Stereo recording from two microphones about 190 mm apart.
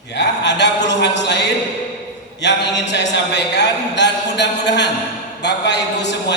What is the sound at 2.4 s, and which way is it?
A man's voice, 65° left (ahead or behind).